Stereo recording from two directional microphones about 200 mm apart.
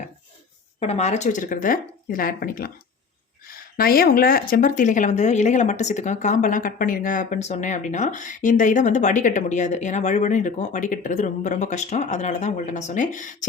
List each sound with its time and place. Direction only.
0.8 s speech: 30° left (ahead or behind)